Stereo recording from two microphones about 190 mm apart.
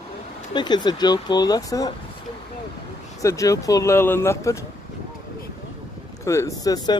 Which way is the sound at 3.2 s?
15° left (ahead or behind).